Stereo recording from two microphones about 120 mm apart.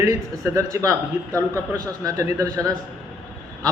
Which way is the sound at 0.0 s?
25° right (ahead or behind).